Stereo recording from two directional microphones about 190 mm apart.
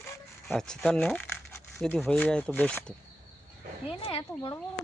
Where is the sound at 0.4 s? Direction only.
5° left (ahead or behind).